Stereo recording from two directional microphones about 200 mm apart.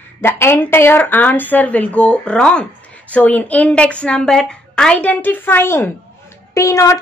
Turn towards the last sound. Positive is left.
turn(degrees=15)  # may be behind; listen again after turning